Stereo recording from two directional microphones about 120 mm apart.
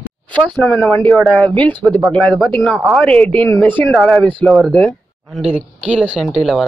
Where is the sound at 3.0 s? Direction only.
10° left (ahead or behind).